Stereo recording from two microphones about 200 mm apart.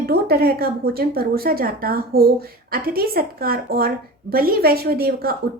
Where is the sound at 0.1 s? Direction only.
50° right (ahead or behind).